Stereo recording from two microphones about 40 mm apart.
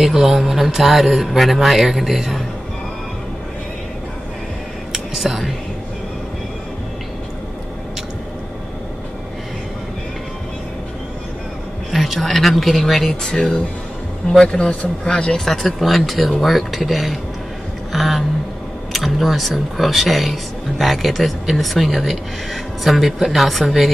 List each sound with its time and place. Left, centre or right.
0.0 s speech: centre
4.9 s whispering: centre
11.9 s speech: centre
13.2 s speech: centre
15.8 s speech: centre